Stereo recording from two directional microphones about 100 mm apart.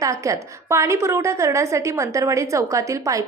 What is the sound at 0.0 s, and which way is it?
A woman's voice, 35° right (ahead or behind).